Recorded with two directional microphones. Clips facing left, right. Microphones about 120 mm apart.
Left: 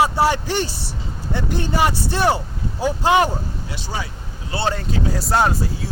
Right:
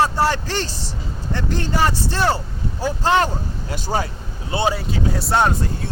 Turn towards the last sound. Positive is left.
turn(degrees=0)  # may be behind; listen again after turning